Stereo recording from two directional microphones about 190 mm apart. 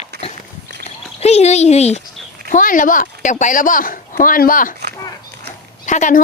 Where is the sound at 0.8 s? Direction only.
35° left (ahead or behind).